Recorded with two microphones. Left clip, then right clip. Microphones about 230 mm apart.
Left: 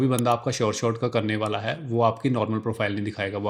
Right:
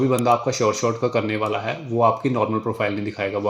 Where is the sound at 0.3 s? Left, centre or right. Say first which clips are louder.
Right 5 dB; left.